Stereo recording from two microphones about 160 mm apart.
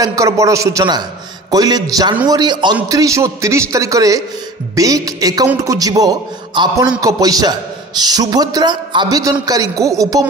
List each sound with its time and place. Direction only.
0.0 s a man's voice: 20° right (ahead or behind)